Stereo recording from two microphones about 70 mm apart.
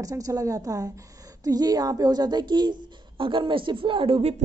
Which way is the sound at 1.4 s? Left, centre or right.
Right.